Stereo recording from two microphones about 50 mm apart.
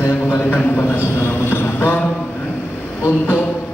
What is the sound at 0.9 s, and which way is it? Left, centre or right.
A man's voice, left.